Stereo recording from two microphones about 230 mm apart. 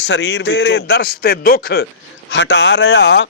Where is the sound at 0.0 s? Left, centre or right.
Left.